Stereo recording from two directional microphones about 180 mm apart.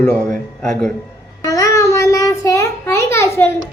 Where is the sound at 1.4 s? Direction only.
20° left (ahead or behind).